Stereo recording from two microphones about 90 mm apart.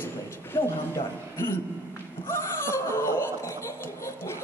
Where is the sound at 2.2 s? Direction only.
30° left (ahead or behind).